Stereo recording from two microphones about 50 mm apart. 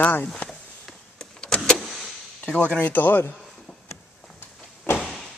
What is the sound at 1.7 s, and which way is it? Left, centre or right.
Vehicle, centre.